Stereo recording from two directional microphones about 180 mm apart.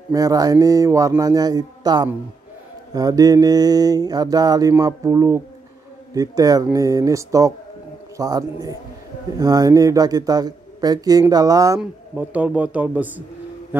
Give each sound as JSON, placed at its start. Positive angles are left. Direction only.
{"t": 0.1, "sound": "mantra", "side_deg": -20}
{"t": 11.8, "sound": "a man's voice", "side_deg": -10}